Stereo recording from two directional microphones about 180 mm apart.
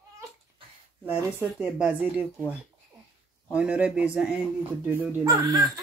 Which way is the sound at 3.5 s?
5° right (ahead or behind).